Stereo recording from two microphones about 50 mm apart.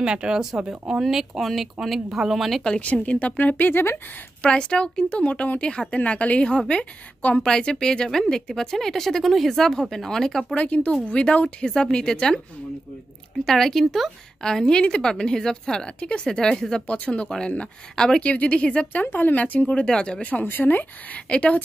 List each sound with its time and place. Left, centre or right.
0.0 s speech: centre
2.8 s speech: left
3.7 s speech: left
4.4 s a woman's voice: centre
7.4 s speech: centre
10.5 s speech: left
13.5 s speech: centre
16.8 s speech: left
17.9 s speech: centre
18.2 s speech: left
19.1 s speech: left
19.8 s speech: centre
20.4 s speech: left
21.3 s speech: left